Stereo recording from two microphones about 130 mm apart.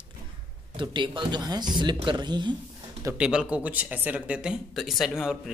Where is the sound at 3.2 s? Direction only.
5° right (ahead or behind).